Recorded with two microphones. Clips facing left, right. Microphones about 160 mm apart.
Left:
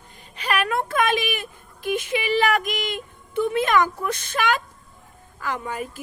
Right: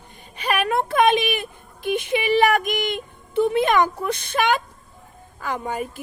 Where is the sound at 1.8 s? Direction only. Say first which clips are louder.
Right 2 dB; 25° right (ahead or behind).